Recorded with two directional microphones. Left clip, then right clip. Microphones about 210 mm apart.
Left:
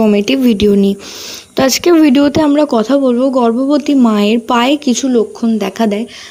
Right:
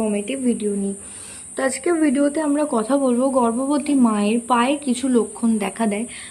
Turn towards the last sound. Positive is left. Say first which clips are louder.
# left 8 dB
turn(degrees=25)  # may be behind; listen again after turning